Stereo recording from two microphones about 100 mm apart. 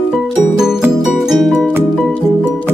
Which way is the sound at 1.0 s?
5° right (ahead or behind).